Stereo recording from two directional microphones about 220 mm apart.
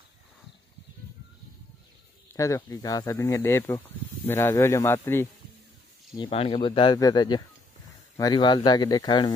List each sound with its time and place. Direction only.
2.3 s speech: 15° left (ahead or behind)
6.1 s speech: 25° left (ahead or behind)